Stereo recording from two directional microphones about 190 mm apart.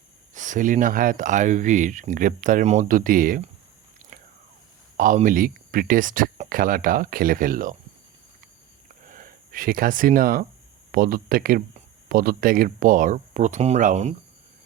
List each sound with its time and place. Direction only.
0.3 s speech: 40° right (ahead or behind)
4.1 s biting: 45° right (ahead or behind)
4.9 s speech: 45° right (ahead or behind)
9.0 s speech: 45° right (ahead or behind)